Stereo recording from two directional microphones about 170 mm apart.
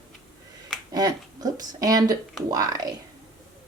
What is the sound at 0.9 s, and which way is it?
Speech, 20° right (ahead or behind).